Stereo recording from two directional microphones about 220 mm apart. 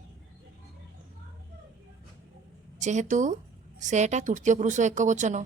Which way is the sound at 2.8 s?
35° right (ahead or behind).